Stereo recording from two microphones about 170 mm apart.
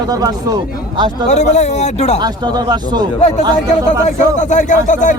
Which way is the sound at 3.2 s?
40° left (ahead or behind).